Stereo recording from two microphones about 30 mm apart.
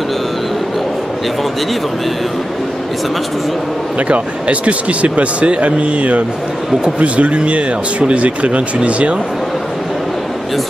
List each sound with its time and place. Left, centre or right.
4.1 s speech: right